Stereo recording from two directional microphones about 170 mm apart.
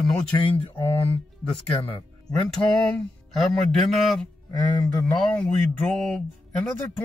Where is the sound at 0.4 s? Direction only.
30° left (ahead or behind).